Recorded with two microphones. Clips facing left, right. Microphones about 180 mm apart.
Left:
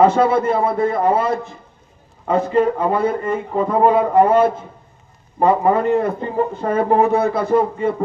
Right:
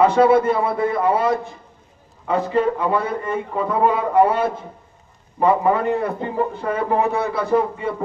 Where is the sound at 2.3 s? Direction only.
45° left (ahead or behind).